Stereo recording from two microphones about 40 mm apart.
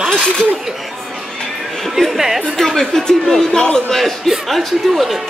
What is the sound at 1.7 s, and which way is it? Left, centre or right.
Speech, centre.